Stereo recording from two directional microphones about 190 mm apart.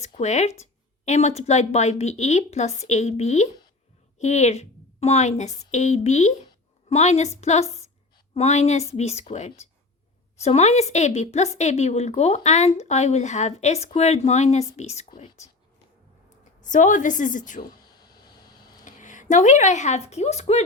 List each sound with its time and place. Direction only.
0.0 s speech: 35° left (ahead or behind)
16.6 s a woman's voice: 40° left (ahead or behind)
17.7 s a sound: 20° left (ahead or behind)
18.9 s speech: 40° left (ahead or behind)